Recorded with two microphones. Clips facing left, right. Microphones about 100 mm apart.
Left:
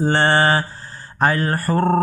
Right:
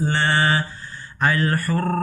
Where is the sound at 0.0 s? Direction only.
40° left (ahead or behind).